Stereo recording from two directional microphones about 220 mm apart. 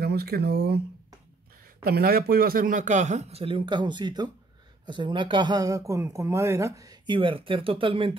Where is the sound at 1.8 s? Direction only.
45° right (ahead or behind).